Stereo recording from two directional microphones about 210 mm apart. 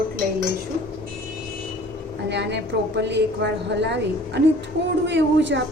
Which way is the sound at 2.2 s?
55° right (ahead or behind).